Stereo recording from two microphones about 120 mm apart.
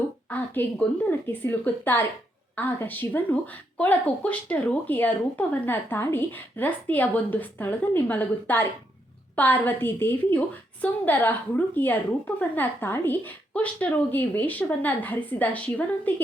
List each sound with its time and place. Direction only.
0.3 s speech: 15° left (ahead or behind)